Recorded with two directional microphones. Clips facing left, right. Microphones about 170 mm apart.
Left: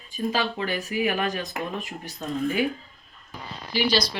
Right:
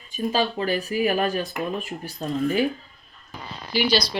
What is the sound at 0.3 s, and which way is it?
Speech, 30° right (ahead or behind).